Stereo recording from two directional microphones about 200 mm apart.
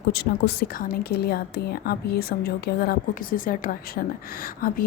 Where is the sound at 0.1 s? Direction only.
55° left (ahead or behind).